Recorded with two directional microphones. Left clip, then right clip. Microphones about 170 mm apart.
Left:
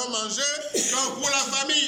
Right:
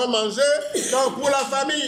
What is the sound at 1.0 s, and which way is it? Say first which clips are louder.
Speech: right 5 dB; 50° right (ahead or behind).